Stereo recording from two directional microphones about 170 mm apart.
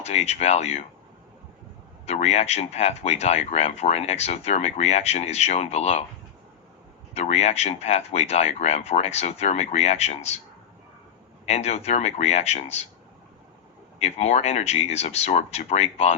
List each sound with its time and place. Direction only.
0.0 s speech: 40° left (ahead or behind)
2.0 s speech: 40° left (ahead or behind)
7.1 s speech: 40° left (ahead or behind)
11.4 s speech: 40° left (ahead or behind)
14.0 s speech: 40° left (ahead or behind)